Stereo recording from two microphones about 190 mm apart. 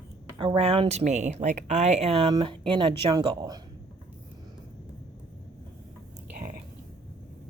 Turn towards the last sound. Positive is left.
turn(degrees=-50)  # may be behind; listen again after turning